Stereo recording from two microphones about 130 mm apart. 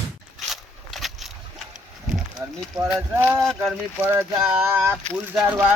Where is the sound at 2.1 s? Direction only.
Centre (ahead or behind).